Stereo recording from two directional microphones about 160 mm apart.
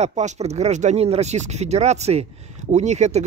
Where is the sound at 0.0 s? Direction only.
45° right (ahead or behind).